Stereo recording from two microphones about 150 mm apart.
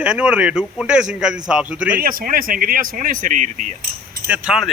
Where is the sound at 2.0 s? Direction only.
75° right (ahead or behind); by 3.8 s 55° right (ahead or behind).